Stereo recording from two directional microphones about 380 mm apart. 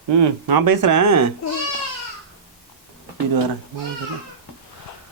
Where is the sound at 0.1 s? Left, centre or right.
Right.